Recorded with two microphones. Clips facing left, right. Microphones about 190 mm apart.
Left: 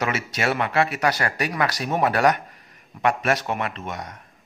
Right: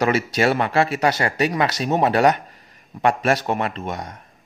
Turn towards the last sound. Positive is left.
turn(degrees=-30)  # may be behind; listen again after turning